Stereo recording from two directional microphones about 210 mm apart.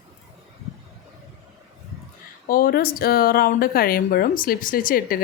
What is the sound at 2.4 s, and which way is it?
Speech, 45° left (ahead or behind).